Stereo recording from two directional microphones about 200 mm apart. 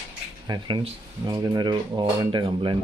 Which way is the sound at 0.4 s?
20° right (ahead or behind).